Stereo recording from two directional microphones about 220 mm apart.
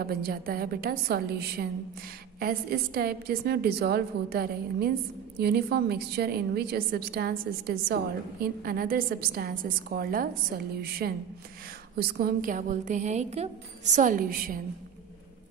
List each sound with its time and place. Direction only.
0.0 s a woman's voice: 45° right (ahead or behind)